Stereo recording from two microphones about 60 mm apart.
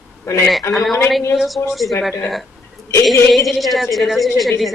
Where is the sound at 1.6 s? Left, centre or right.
Left.